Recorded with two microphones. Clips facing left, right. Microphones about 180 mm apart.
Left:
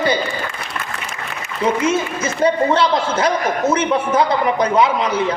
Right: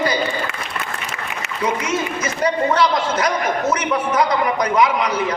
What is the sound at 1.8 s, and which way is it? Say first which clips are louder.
A man's voice: left 4 dB; 25° left (ahead or behind).